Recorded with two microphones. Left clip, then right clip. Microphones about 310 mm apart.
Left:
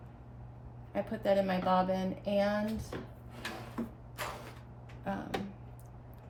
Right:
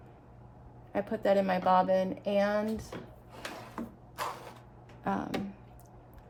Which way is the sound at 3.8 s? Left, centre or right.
Centre.